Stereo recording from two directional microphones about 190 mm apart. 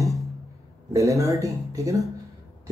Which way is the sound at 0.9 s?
15° right (ahead or behind).